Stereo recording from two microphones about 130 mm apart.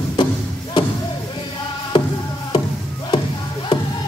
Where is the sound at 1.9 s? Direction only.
40° left (ahead or behind).